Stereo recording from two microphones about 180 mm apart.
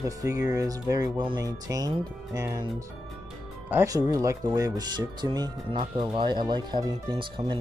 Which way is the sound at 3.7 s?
15° right (ahead or behind).